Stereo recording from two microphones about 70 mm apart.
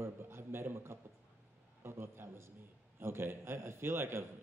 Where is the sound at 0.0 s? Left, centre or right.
Right.